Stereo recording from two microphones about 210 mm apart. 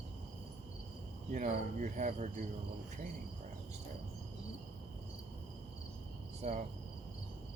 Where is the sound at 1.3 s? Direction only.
35° right (ahead or behind).